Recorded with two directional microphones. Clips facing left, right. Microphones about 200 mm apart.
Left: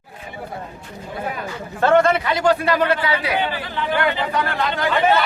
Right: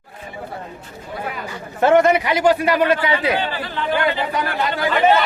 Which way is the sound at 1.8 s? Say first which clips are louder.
Right 2 dB; 20° right (ahead or behind).